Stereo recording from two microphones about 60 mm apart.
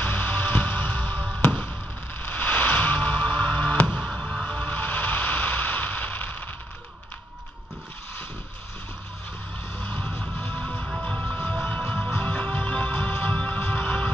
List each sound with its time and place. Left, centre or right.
0.0 s music: left; by 4.5 s centre
4.5 s a sound: left
9.8 s music: left